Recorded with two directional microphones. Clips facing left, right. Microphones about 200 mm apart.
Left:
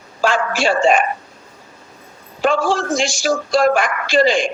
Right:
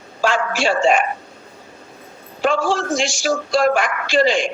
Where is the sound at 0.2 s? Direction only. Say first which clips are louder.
Left 1 dB; 50° left (ahead or behind).